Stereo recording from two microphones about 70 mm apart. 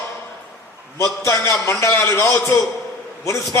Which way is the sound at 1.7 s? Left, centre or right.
Left.